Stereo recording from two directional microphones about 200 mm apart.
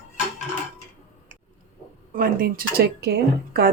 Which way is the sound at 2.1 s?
45° right (ahead or behind).